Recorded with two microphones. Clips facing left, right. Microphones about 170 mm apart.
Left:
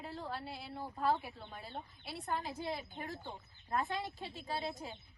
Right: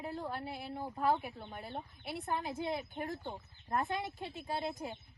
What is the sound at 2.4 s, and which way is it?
Speech, 20° right (ahead or behind).